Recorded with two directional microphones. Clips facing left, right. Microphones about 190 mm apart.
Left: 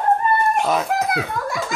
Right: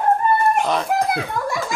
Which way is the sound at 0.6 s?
5° left (ahead or behind).